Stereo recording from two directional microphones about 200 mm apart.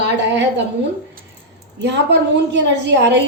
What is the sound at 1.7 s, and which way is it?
A woman's voice, 60° right (ahead or behind).